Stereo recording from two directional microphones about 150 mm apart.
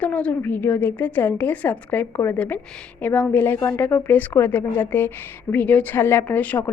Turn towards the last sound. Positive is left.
turn(degrees=10)  # may be behind; listen again after turning